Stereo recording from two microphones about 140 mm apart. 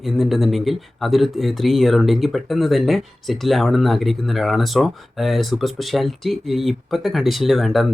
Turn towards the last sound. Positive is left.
turn(degrees=0)  # may be behind; listen again after turning